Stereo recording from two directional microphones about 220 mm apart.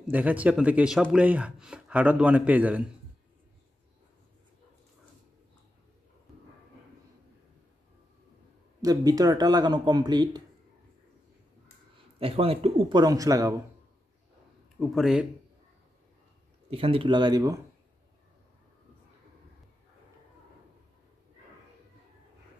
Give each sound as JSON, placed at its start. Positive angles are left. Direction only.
{"t": 0.1, "sound": "speech", "side_deg": -5}
{"t": 8.8, "sound": "speech", "side_deg": -15}
{"t": 12.2, "sound": "speech", "side_deg": -25}
{"t": 14.8, "sound": "speech", "side_deg": 0}
{"t": 16.7, "sound": "speech", "side_deg": -25}